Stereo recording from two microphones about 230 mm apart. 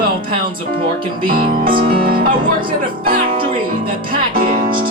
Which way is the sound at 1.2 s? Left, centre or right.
Right.